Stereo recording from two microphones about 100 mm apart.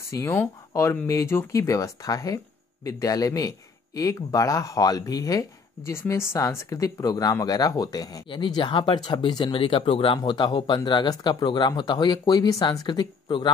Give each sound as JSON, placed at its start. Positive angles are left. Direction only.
{"t": 0.0, "sound": "speech", "side_deg": 30}
{"t": 8.3, "sound": "speech", "side_deg": 50}